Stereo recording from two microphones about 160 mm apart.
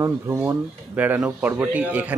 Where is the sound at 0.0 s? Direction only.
10° right (ahead or behind).